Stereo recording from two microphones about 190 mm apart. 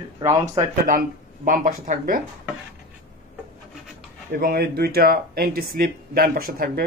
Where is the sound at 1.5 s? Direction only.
45° right (ahead or behind).